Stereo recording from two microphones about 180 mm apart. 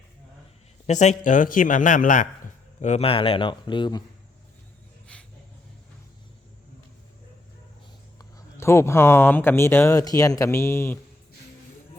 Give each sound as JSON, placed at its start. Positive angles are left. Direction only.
{"t": 0.9, "sound": "a man's voice", "side_deg": 40}
{"t": 2.8, "sound": "speech", "side_deg": 35}
{"t": 5.1, "sound": "a sound", "side_deg": 5}
{"t": 8.2, "sound": "speech", "side_deg": 15}